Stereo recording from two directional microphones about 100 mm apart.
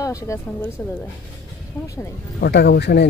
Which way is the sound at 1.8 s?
30° left (ahead or behind).